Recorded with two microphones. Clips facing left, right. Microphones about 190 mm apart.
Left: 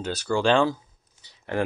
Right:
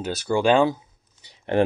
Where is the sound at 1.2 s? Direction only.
20° right (ahead or behind).